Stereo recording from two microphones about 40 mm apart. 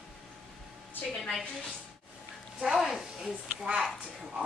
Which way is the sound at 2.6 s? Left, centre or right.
Centre.